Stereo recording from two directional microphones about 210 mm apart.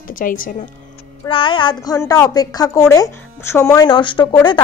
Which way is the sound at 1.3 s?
25° left (ahead or behind).